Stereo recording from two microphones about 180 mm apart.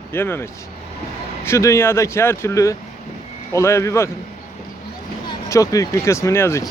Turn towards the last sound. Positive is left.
turn(degrees=15)  # may be behind; listen again after turning